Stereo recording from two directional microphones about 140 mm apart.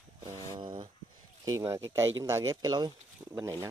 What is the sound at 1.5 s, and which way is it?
Speech, 20° right (ahead or behind).